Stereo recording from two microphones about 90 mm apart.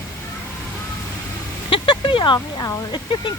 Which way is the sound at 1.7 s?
70° left (ahead or behind).